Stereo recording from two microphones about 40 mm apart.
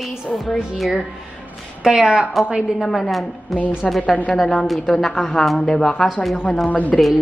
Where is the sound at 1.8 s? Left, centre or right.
Centre.